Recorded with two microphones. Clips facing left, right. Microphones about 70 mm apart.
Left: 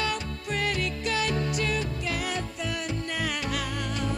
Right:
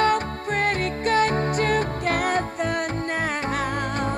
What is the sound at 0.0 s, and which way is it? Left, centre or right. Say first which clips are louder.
Music: right 10 dB; right.